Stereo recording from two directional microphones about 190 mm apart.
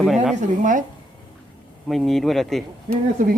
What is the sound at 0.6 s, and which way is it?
Speech, 40° right (ahead or behind).